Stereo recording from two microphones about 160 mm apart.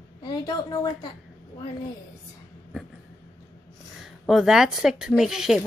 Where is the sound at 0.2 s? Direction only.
25° left (ahead or behind).